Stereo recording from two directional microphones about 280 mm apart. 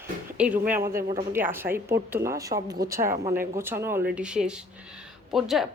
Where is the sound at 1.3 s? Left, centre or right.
Centre.